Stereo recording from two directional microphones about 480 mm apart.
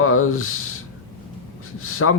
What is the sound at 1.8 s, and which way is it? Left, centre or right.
Speech, left.